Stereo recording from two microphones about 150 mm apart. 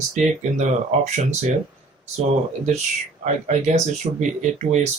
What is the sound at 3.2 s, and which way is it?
Speech, 50° right (ahead or behind).